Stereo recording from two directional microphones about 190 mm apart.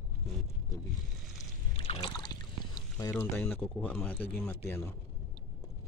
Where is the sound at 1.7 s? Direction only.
30° left (ahead or behind).